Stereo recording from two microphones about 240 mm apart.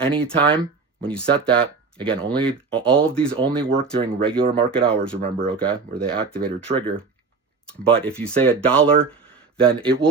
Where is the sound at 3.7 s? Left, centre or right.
Right.